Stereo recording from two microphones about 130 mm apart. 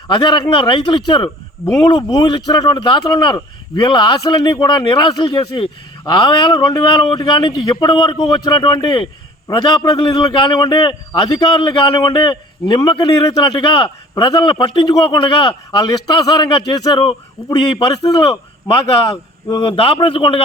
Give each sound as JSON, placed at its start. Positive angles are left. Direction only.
{"t": 0.1, "sound": "a man's voice", "side_deg": 35}
{"t": 19.5, "sound": "a man's voice", "side_deg": 40}